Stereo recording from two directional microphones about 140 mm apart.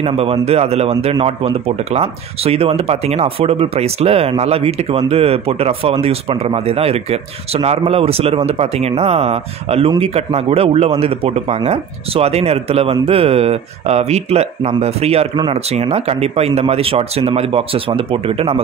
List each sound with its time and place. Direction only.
0.0 s speech: 45° right (ahead or behind)